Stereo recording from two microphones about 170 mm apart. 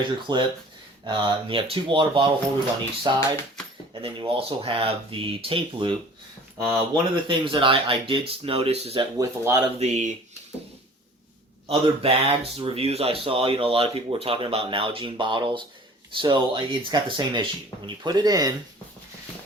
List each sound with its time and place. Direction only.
0.0 s speech: 25° right (ahead or behind)
9.1 s speech: 20° right (ahead or behind)
9.7 s speech: 40° right (ahead or behind)
11.7 s speech: 30° right (ahead or behind)